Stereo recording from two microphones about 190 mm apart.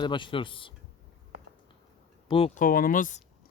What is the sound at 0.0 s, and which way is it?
Speech, 25° left (ahead or behind).